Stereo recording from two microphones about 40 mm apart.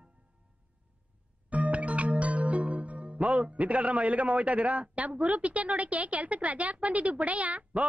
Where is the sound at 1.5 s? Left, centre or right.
Right.